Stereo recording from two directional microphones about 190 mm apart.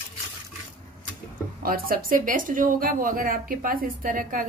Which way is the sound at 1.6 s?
50° right (ahead or behind).